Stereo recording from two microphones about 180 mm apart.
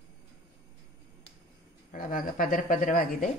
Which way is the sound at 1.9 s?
50° left (ahead or behind).